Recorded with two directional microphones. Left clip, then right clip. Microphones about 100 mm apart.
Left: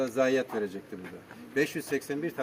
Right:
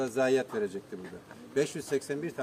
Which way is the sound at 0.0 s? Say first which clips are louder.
Left 1 dB; 15° right (ahead or behind).